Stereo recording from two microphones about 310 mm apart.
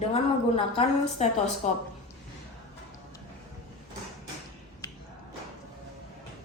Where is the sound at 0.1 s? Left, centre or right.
Centre.